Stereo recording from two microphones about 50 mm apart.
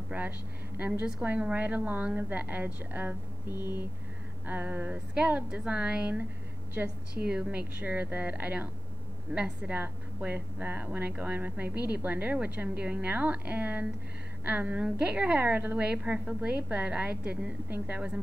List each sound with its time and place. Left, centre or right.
0.1 s speech: right
4.5 s speech: right
5.7 s a woman's voice: centre
6.8 s speech: right
7.2 s a woman's voice: centre
7.8 s speech: right
9.3 s a woman's voice: centre
9.7 s speech: right
12.6 s speech: right
14.8 s a woman's voice: centre
15.4 s speech: right
15.9 s a woman's voice: right
17.1 s speech: right